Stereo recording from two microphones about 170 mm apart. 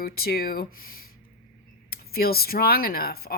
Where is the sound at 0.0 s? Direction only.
60° left (ahead or behind).